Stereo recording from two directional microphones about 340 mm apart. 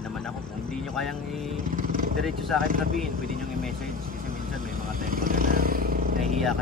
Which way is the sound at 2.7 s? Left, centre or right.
Right.